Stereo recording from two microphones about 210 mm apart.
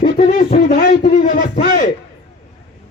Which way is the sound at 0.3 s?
40° left (ahead or behind).